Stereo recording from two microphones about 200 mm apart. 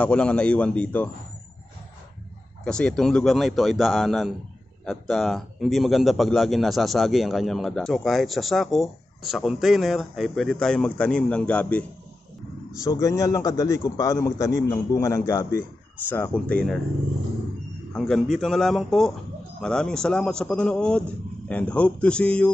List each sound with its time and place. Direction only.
0.0 s speech: 5° left (ahead or behind)
2.6 s speech: 5° left (ahead or behind)
12.8 s a man's voice: 15° left (ahead or behind)
17.9 s speech: centre (ahead or behind)